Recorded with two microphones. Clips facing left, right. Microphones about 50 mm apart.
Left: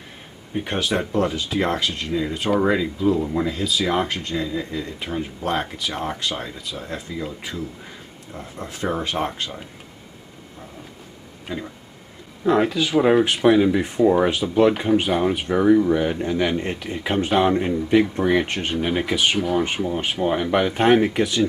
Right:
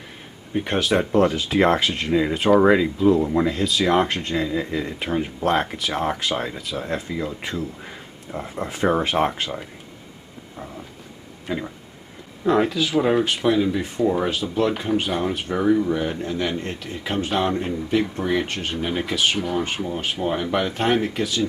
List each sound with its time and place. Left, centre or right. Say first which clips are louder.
0.5 s speech: right 2 dB; centre
2.1 s speech: right 5 dB; centre
11.4 s speech: right 3 dB; centre
12.4 s speech: left 1 dB; centre